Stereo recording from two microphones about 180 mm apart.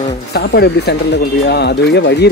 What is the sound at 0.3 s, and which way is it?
Speech, 65° left (ahead or behind).